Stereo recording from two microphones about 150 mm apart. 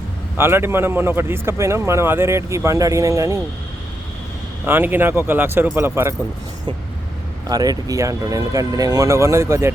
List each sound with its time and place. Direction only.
0.3 s speech: 15° right (ahead or behind)
4.6 s speech: 15° right (ahead or behind)
7.4 s speech: 25° right (ahead or behind)